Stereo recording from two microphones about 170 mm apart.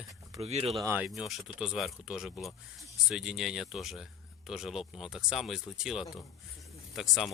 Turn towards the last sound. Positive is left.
turn(degrees=0)  # may be behind; listen again after turning